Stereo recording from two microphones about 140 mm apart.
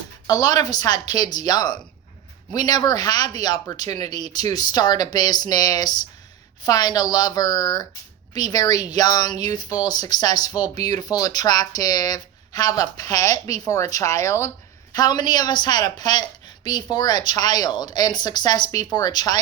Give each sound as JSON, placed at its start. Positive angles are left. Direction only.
{"t": 0.3, "sound": "speech", "side_deg": 25}